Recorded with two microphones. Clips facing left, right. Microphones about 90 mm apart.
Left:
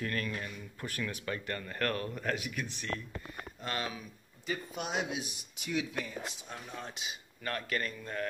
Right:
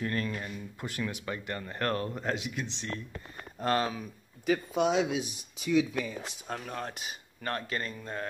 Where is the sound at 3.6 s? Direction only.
40° right (ahead or behind).